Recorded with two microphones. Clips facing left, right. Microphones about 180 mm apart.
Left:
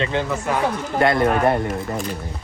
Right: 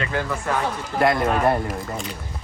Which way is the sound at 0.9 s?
Centre (ahead or behind).